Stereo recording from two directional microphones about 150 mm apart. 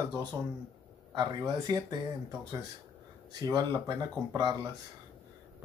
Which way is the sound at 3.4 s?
25° right (ahead or behind).